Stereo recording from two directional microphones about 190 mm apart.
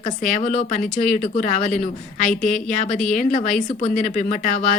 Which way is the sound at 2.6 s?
40° left (ahead or behind).